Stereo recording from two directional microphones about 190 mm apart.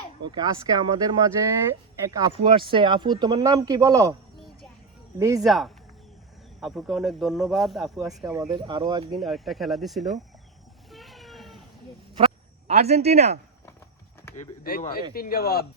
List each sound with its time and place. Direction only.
0.2 s speech: 20° right (ahead or behind)
5.4 s speech: centre (ahead or behind)
7.9 s speech: 20° right (ahead or behind)
9.2 s speech: centre (ahead or behind)
10.9 s vehicle: centre (ahead or behind)
12.1 s a sound: 35° right (ahead or behind)
14.3 s speech: 45° left (ahead or behind)